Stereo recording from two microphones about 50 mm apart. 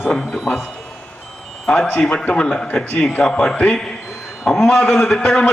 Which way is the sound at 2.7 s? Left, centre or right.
Centre.